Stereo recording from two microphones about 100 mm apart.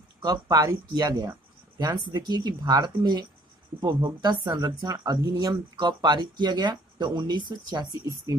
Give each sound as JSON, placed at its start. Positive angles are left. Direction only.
{"t": 0.2, "sound": "speech", "side_deg": -40}